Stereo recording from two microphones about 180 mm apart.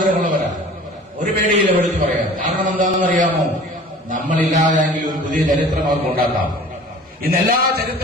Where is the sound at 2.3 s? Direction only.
45° right (ahead or behind).